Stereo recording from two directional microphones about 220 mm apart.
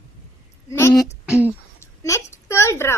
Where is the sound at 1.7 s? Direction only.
15° left (ahead or behind).